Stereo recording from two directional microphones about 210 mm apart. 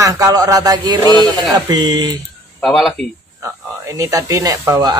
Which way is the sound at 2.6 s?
Centre (ahead or behind).